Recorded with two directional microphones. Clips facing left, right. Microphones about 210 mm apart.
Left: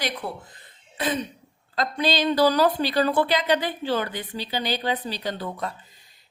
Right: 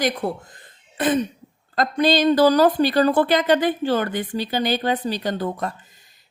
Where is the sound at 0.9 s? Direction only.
50° right (ahead or behind).